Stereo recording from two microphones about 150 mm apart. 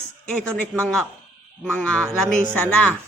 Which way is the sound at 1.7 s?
10° left (ahead or behind).